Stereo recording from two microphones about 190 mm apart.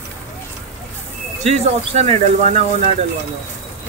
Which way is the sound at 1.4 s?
35° right (ahead or behind).